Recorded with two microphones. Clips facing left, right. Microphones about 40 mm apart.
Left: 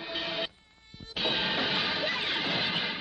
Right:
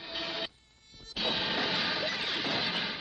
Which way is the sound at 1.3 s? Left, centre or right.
Centre.